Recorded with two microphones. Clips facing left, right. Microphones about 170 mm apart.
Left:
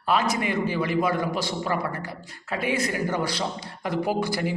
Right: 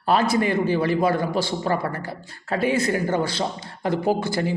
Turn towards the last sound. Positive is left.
turn(degrees=-25)  # may be behind; listen again after turning